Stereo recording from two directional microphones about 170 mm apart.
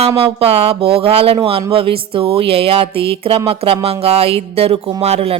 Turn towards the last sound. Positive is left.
turn(degrees=-35)  # may be behind; listen again after turning